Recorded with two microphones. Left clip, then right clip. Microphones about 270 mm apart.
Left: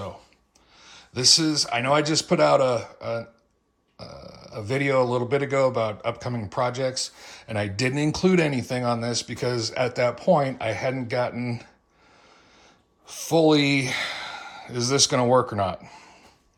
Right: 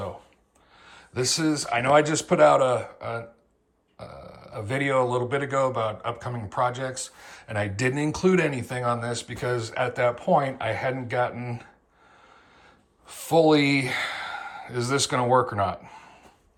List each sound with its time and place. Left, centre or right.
0.9 s speech: centre
13.1 s speech: centre